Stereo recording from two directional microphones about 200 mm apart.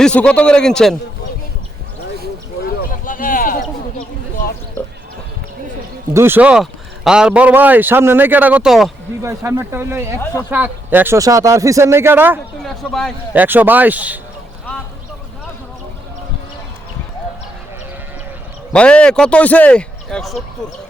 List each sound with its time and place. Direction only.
0.0 s a man's voice: 5° left (ahead or behind)
2.9 s a sound: 45° left (ahead or behind)
4.8 s a sound: 10° left (ahead or behind)
6.1 s a man's voice: 10° right (ahead or behind)
9.2 s a man's voice: 15° right (ahead or behind)
12.6 s a man's voice: centre (ahead or behind)
13.3 s a man's voice: 10° right (ahead or behind)
18.7 s a man's voice: 5° left (ahead or behind)